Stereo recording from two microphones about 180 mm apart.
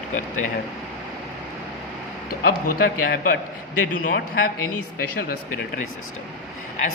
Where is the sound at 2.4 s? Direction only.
55° left (ahead or behind).